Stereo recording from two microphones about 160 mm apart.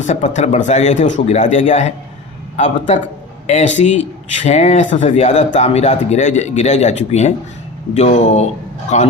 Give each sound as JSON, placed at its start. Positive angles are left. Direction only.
{"t": 0.1, "sound": "speech", "side_deg": 45}